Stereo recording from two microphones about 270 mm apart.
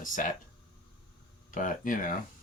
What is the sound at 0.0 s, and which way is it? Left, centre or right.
Speech, left.